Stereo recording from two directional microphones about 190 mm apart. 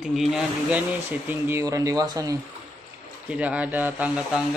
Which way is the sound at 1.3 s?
15° right (ahead or behind).